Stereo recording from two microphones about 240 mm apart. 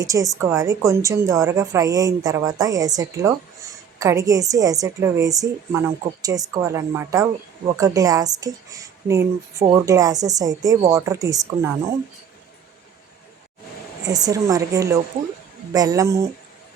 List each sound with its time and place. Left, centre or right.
0.0 s a woman's voice: centre
14.1 s a woman's voice: centre